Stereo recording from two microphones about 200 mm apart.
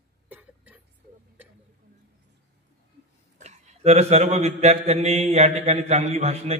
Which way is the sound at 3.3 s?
35° right (ahead or behind).